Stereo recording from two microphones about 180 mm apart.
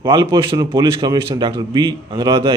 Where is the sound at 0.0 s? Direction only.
25° right (ahead or behind).